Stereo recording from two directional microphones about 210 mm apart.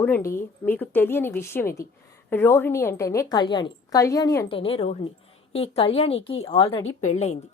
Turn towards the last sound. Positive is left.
turn(degrees=35)  # may be behind; listen again after turning